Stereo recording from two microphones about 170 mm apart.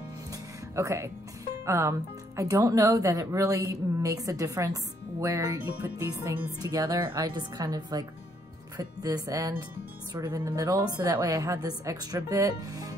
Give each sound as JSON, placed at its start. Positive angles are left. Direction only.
{"t": 0.3, "sound": "music", "side_deg": -15}
{"t": 1.7, "sound": "speech", "side_deg": -15}